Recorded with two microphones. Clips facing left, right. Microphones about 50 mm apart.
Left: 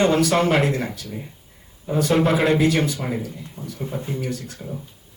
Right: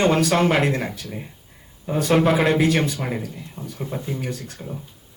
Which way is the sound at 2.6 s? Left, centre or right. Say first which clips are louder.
Even; right.